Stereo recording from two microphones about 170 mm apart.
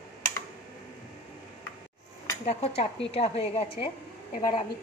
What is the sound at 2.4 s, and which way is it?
A woman's voice, 35° left (ahead or behind).